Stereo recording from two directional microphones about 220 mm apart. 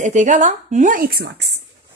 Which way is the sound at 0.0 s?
35° right (ahead or behind).